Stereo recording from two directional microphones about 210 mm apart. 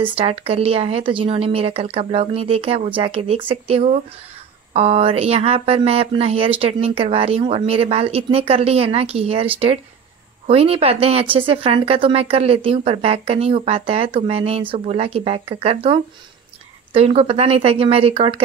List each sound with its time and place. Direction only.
0.0 s speech: 25° right (ahead or behind)